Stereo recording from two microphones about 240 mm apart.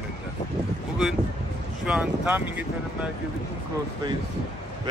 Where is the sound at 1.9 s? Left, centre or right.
Centre.